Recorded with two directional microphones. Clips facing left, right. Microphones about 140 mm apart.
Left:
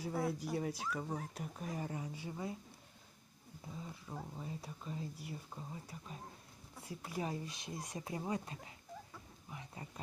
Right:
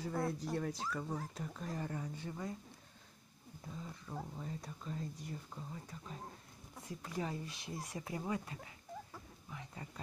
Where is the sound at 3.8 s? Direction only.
15° left (ahead or behind).